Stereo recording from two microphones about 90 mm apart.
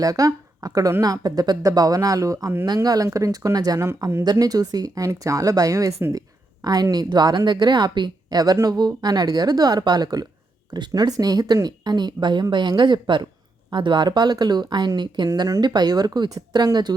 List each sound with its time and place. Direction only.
0.0 s a woman's voice: 40° right (ahead or behind)
15.3 s speech: 40° right (ahead or behind)
15.6 s speech: 50° right (ahead or behind)